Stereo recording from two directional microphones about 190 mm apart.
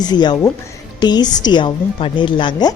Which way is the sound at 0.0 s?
20° left (ahead or behind).